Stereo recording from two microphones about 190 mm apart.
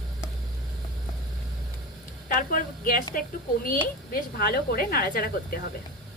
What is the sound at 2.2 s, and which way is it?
Speech, 45° left (ahead or behind).